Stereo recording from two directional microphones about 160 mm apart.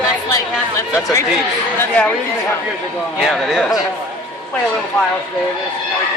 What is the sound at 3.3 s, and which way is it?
Speech, centre (ahead or behind).